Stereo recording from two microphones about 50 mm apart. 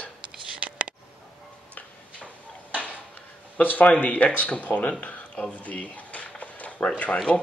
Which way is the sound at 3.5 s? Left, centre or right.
Left.